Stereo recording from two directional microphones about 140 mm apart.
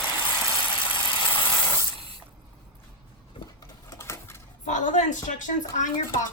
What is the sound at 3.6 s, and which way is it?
Pigeon, 20° left (ahead or behind).